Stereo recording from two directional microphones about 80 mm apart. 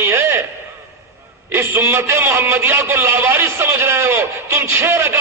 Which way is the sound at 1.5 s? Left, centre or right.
Right.